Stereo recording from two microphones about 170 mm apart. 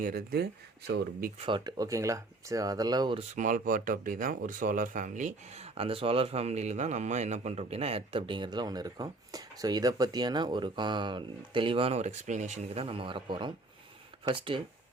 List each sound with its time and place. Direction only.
0.0 s speech: 60° right (ahead or behind)
1.4 s speech: 30° right (ahead or behind)
3.2 s speech: 50° right (ahead or behind); by 14.6 s 30° right (ahead or behind)